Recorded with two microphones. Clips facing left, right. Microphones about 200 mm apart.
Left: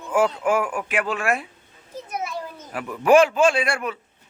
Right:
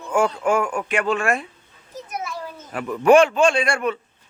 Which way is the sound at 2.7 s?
5° left (ahead or behind).